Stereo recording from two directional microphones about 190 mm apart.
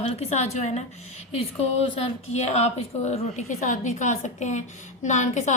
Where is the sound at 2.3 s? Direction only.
35° left (ahead or behind).